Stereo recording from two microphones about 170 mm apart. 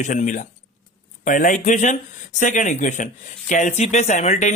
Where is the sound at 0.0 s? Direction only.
45° left (ahead or behind).